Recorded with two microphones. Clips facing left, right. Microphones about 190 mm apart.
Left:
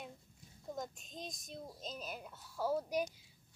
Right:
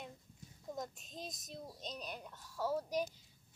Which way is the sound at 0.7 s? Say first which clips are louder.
Left 1 dB; centre (ahead or behind).